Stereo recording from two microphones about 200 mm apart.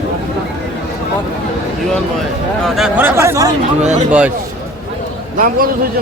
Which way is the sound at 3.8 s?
35° right (ahead or behind).